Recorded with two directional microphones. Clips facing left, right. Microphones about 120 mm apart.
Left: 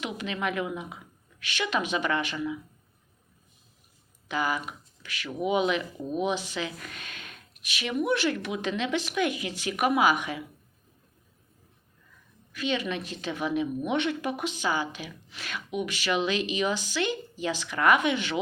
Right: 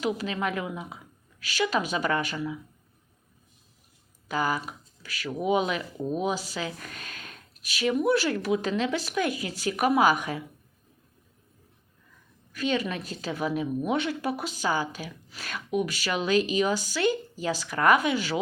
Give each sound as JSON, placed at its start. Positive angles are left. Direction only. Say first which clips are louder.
{"t": 0.0, "sound": "speech", "louder": "right 3 dB", "side_deg": -35}
{"t": 4.3, "sound": "speech", "louder": "right 1 dB", "side_deg": -40}
{"t": 12.5, "sound": "speech", "louder": "right 2 dB", "side_deg": -40}